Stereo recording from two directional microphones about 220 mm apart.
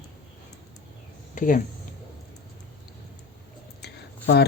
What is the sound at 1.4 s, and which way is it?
Speech, 35° left (ahead or behind).